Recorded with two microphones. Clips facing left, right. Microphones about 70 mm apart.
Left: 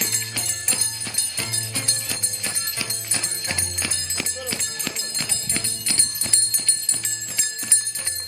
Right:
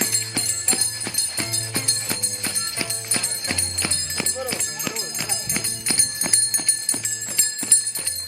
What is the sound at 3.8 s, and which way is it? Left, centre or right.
Clip-clop, right.